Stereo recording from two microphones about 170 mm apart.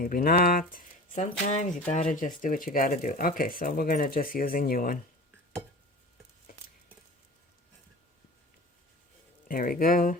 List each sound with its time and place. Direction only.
0.0 s speech: 55° left (ahead or behind)
9.5 s speech: 55° left (ahead or behind)